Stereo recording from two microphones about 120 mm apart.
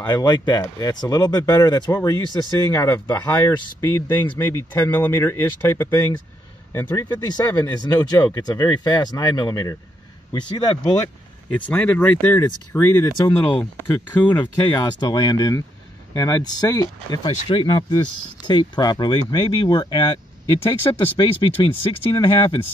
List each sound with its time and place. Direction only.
0.0 s speech: 35° left (ahead or behind)
4.8 s speech: 15° left (ahead or behind)
5.1 s speech: 30° left (ahead or behind)
6.9 s speech: 35° left (ahead or behind)
11.7 s speech: 15° left (ahead or behind)
12.4 s speech: 30° left (ahead or behind)
13.4 s speech: 15° left (ahead or behind)
14.3 s speech: 40° left (ahead or behind)